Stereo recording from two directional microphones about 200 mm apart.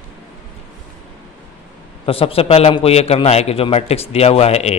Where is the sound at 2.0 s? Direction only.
30° left (ahead or behind).